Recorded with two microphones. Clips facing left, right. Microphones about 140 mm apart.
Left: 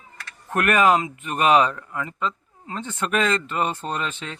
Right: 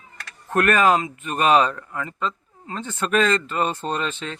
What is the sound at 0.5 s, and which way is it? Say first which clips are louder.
A man's voice: right 1 dB; 15° left (ahead or behind).